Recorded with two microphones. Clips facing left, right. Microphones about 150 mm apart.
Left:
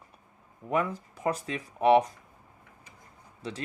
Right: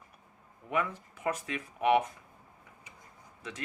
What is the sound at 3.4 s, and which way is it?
Speech, 30° left (ahead or behind).